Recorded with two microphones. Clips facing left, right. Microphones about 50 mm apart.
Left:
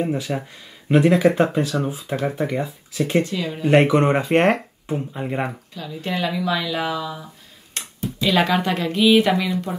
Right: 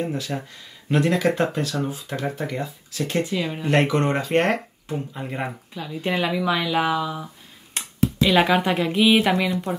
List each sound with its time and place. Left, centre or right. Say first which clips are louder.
0.0 s speech: left 3 dB; centre
1.7 s speech: left 3 dB; centre
3.3 s speech: even; centre
3.6 s speech: left 6 dB; centre
5.8 s speech: right 1 dB; centre
7.8 s a sound: even; centre
8.2 s speech: even; centre